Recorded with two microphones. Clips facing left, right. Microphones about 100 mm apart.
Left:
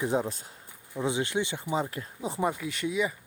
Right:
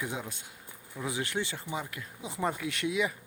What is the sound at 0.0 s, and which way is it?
Speech, 35° left (ahead or behind).